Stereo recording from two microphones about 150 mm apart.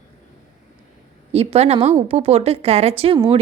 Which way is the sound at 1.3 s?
40° right (ahead or behind).